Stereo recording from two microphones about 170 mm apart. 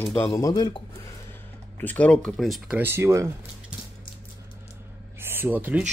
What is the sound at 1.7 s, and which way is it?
Speech, 10° left (ahead or behind).